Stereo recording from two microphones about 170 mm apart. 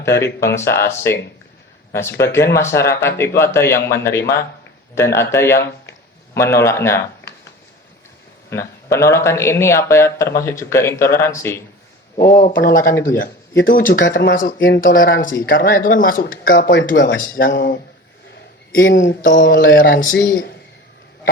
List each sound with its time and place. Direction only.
0.0 s speech: 15° left (ahead or behind)
8.4 s speech: 15° left (ahead or behind)
12.2 s speech: 60° left (ahead or behind)
12.9 s speech: 15° left (ahead or behind)
13.6 s speech: 60° left (ahead or behind); by 17.2 s 75° left (ahead or behind)
17.2 s speech: 55° left (ahead or behind); by 17.7 s 75° left (ahead or behind)
18.7 s speech: 75° left (ahead or behind); by 19.6 s 90° left
19.6 s speech: 55° left (ahead or behind)